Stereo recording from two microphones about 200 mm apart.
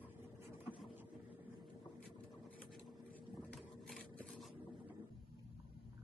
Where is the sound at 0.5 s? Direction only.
10° right (ahead or behind).